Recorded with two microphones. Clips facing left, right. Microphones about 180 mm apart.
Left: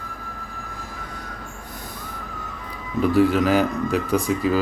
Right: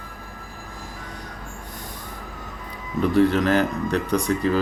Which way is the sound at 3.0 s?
10° left (ahead or behind).